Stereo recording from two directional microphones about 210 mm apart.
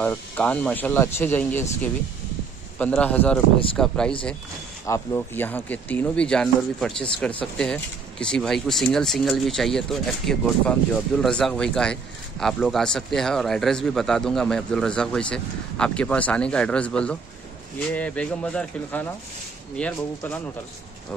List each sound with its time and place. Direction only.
0.0 s speech: 5° left (ahead or behind)
4.8 s speech: 15° left (ahead or behind)